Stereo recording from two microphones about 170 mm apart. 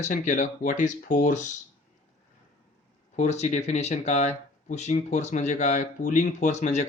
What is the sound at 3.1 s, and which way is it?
Speech, 40° left (ahead or behind).